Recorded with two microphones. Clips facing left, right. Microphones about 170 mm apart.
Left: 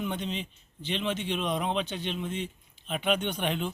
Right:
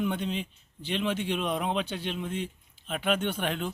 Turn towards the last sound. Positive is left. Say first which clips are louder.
# even
turn(degrees=-5)  # may be behind; listen again after turning